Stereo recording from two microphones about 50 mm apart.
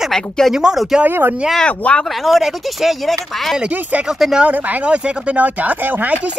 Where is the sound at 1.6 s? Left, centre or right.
Left.